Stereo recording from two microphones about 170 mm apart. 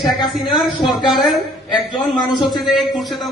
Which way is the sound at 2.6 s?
Centre (ahead or behind).